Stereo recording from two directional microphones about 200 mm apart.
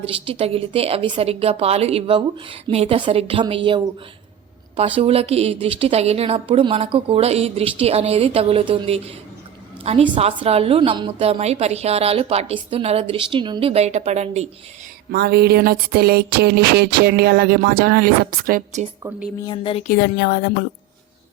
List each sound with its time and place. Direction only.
0.0 s a woman's voice: 25° right (ahead or behind)
4.9 s a woman's voice: 30° right (ahead or behind)
15.1 s a sound: 50° right (ahead or behind)
19.5 s speech: 25° left (ahead or behind)
19.9 s a woman's voice: 55° left (ahead or behind)